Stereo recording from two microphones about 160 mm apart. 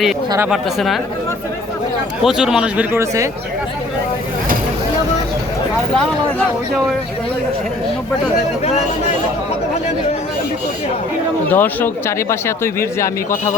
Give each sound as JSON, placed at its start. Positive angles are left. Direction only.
{"t": 0.3, "sound": "a man's voice", "side_deg": -15}
{"t": 0.5, "sound": "speech", "side_deg": 0}
{"t": 2.2, "sound": "a man's voice", "side_deg": -5}
{"t": 11.5, "sound": "speech", "side_deg": 10}